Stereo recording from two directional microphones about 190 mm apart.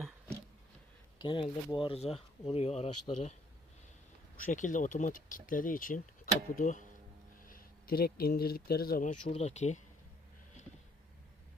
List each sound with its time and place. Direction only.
1.2 s speech: 25° left (ahead or behind)
4.4 s speech: 40° left (ahead or behind)
9.2 s speech: 35° left (ahead or behind)